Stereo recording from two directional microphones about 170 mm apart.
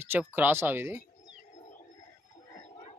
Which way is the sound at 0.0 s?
10° right (ahead or behind).